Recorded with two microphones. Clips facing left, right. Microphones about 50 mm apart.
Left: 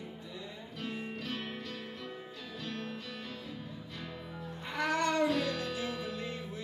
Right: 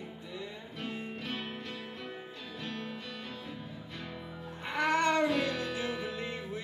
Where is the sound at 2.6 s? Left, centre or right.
Right.